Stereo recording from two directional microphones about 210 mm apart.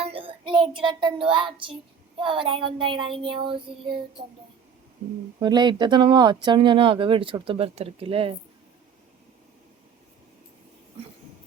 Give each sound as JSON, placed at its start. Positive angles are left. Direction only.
{"t": 0.0, "sound": "child singing", "side_deg": -25}
{"t": 2.2, "sound": "speech", "side_deg": -25}
{"t": 5.4, "sound": "speech", "side_deg": -20}